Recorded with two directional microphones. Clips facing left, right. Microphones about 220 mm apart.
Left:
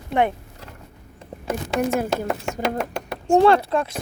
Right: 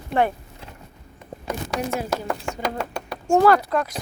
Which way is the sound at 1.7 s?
50° left (ahead or behind).